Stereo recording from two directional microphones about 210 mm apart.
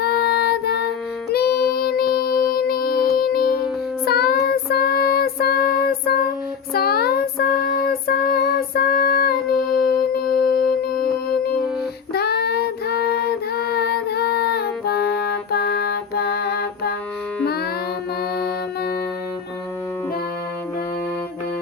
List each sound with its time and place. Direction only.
0.0 s music: 50° left (ahead or behind)
4.0 s child singing: 45° left (ahead or behind)
6.7 s music: 45° left (ahead or behind)
12.1 s child singing: 50° left (ahead or behind)
17.4 s music: 50° left (ahead or behind)